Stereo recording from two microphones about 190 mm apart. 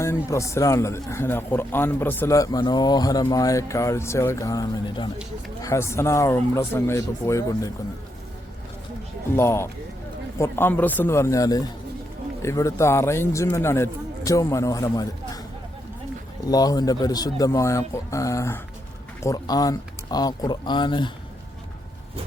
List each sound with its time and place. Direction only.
0.0 s a man's voice: 15° left (ahead or behind)
9.3 s a man's voice: 15° left (ahead or behind)
16.5 s speech: 20° left (ahead or behind)